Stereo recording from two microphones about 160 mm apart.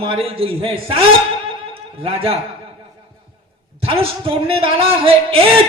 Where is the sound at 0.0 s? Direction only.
35° right (ahead or behind).